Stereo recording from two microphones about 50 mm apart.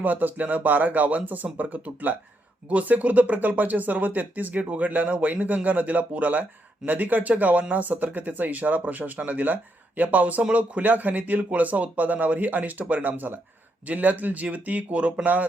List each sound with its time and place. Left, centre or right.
0.0 s speech: right